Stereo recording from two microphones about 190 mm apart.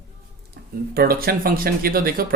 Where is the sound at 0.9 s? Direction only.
55° right (ahead or behind).